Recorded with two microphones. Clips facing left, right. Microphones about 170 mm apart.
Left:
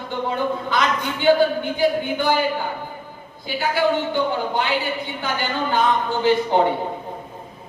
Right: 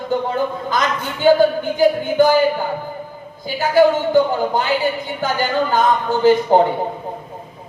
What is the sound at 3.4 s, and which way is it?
Speech, 45° right (ahead or behind).